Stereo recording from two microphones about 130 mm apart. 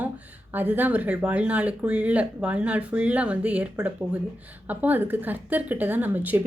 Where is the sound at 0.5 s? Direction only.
15° right (ahead or behind).